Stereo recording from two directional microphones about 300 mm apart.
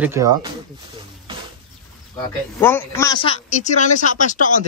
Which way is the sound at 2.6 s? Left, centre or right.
Centre.